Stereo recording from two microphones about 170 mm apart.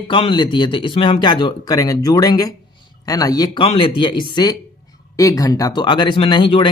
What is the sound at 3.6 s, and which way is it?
Speech, 35° left (ahead or behind).